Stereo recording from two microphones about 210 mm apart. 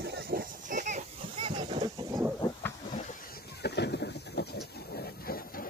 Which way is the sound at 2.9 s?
45° left (ahead or behind).